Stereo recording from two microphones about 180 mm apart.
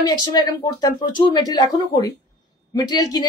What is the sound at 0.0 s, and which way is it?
A man's voice, 25° left (ahead or behind).